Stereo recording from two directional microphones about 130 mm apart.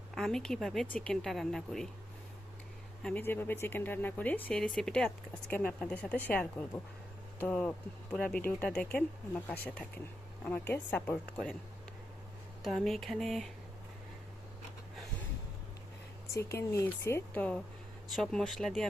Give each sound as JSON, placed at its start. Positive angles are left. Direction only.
{"t": 0.1, "sound": "speech", "side_deg": 5}
{"t": 3.0, "sound": "speech", "side_deg": 10}
{"t": 12.6, "sound": "speech", "side_deg": 0}
{"t": 16.3, "sound": "speech", "side_deg": 20}